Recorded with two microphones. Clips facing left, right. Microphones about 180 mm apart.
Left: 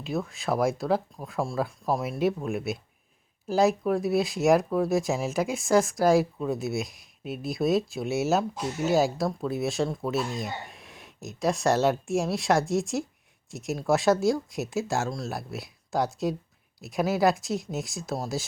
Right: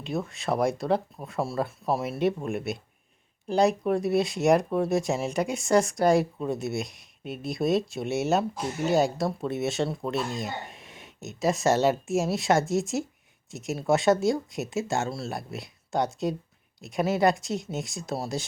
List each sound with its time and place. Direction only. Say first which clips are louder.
0.0 s speech: even; centre (ahead or behind)